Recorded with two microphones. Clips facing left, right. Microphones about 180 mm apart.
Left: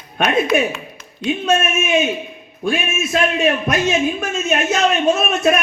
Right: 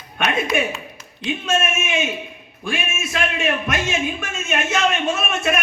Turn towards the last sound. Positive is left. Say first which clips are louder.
# left 6 dB
turn(degrees=40)  # may be behind; listen again after turning